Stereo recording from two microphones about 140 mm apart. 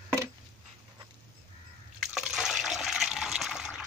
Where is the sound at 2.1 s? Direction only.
5° right (ahead or behind).